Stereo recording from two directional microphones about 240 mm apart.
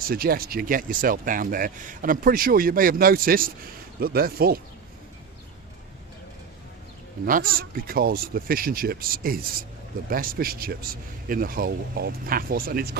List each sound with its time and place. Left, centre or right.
0.1 s speech: right
7.3 s speech: right